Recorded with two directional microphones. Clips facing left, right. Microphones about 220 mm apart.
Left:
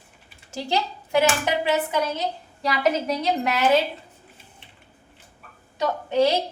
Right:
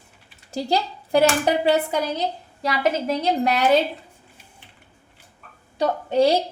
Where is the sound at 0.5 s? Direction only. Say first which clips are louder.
Right 3 dB; 35° right (ahead or behind).